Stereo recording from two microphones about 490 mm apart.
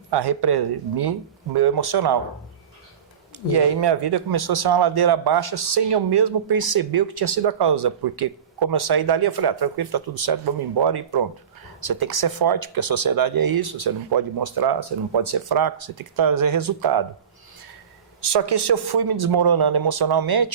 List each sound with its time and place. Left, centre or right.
0.1 s speech: right
3.5 s speech: right
18.2 s speech: right